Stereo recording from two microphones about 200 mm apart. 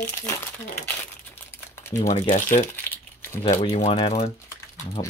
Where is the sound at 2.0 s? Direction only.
40° left (ahead or behind).